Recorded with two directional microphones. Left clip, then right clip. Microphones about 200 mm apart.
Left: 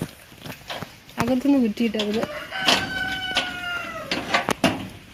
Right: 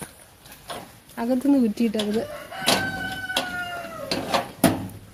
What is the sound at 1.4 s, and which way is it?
Speech, 30° right (ahead or behind).